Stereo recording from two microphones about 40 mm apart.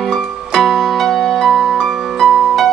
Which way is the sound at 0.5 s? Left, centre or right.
Centre.